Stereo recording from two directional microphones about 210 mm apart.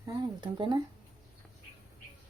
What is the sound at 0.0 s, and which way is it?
Speech, 20° right (ahead or behind).